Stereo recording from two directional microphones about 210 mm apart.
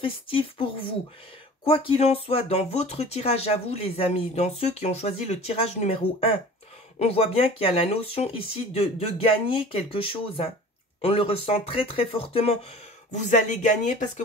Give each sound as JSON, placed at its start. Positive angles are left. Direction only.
{"t": 0.0, "sound": "speech", "side_deg": 25}